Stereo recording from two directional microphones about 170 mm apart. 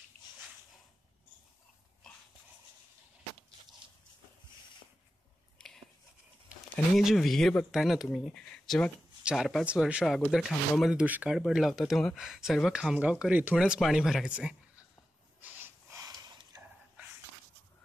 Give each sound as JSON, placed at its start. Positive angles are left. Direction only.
{"t": 5.6, "sound": "a sound", "side_deg": 5}
{"t": 7.0, "sound": "speech", "side_deg": 0}
{"t": 15.4, "sound": "snort", "side_deg": -15}